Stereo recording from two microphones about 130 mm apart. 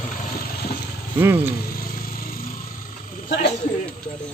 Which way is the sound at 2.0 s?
90° left.